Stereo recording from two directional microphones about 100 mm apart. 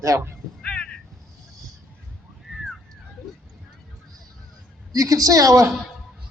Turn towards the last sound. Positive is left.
turn(degrees=-35)  # may be behind; listen again after turning